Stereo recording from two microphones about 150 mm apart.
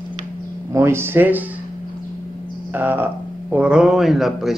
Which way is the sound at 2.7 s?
10° right (ahead or behind).